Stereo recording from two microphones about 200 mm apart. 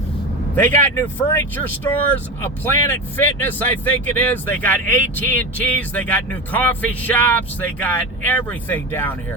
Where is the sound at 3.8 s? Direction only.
10° left (ahead or behind).